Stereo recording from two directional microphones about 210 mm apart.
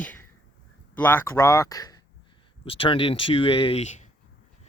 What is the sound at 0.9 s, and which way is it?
Speech, 10° left (ahead or behind).